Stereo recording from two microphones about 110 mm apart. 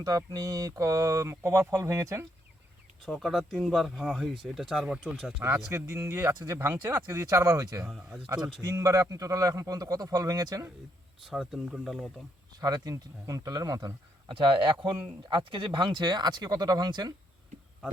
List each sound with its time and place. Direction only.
0.0 s speech: 30° right (ahead or behind)
3.1 s speech: centre (ahead or behind)
5.7 s speech: 25° right (ahead or behind)
7.9 s speech: 5° right (ahead or behind)
8.6 s a man's voice: 30° right (ahead or behind)
11.3 s speech: 5° right (ahead or behind)
12.5 s a man's voice: 35° right (ahead or behind)
14.3 s a man's voice: 50° right (ahead or behind)